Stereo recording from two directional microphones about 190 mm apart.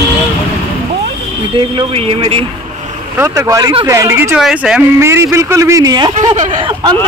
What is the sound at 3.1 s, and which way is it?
Speech, 15° right (ahead or behind).